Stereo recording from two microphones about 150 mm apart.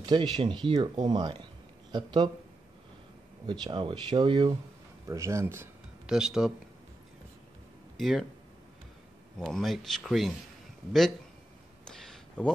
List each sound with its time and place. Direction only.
0.0 s speech: 30° right (ahead or behind)
3.4 s speech: 30° right (ahead or behind)
5.0 s speech: 20° right (ahead or behind)
6.0 s speech: 5° right (ahead or behind)
8.0 s speech: centre (ahead or behind)
9.4 s speech: centre (ahead or behind)
11.8 s a sound: 5° left (ahead or behind)